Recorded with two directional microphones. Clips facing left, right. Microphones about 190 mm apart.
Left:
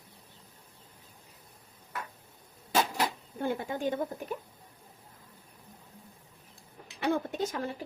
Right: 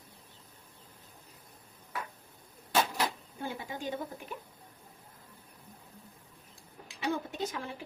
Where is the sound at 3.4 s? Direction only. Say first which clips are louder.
Left 7 dB; 55° left (ahead or behind).